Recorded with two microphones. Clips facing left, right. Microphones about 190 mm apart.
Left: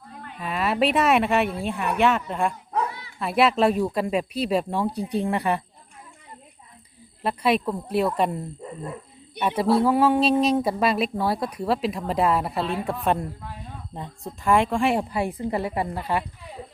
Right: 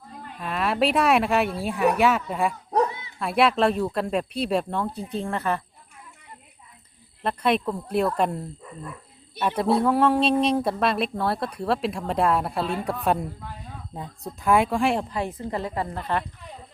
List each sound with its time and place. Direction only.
0.3 s speech: centre (ahead or behind)
2.9 s bow-wow: 20° right (ahead or behind)
3.2 s speech: centre (ahead or behind)
7.2 s speech: 5° left (ahead or behind)
8.6 s dog: 25° left (ahead or behind)
9.7 s speech: 5° left (ahead or behind)